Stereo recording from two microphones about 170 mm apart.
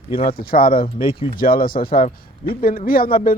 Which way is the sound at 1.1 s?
30° left (ahead or behind).